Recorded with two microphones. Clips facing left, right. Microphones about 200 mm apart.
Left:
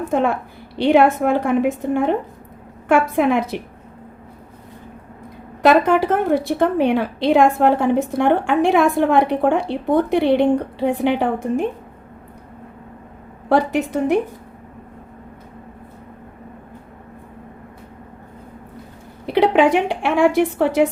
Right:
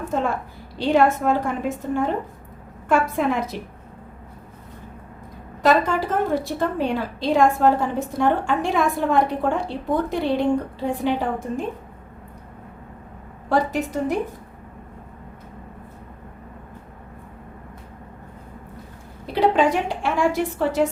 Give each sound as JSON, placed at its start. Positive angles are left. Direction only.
{"t": 0.1, "sound": "a woman's voice", "side_deg": 65}
{"t": 5.6, "sound": "a woman's voice", "side_deg": 65}
{"t": 13.5, "sound": "a woman's voice", "side_deg": 65}
{"t": 19.2, "sound": "a woman's voice", "side_deg": 65}